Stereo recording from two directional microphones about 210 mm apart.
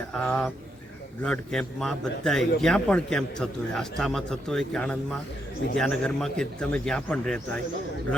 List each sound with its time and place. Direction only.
0.1 s a man's voice: 5° left (ahead or behind)